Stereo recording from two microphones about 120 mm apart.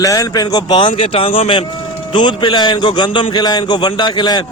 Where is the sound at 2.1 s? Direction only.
40° left (ahead or behind).